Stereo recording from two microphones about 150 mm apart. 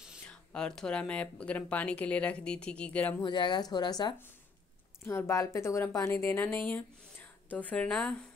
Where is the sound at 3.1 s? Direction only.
30° left (ahead or behind).